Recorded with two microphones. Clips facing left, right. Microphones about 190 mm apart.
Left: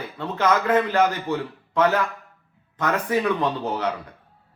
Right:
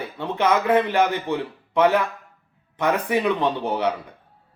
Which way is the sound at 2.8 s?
15° right (ahead or behind).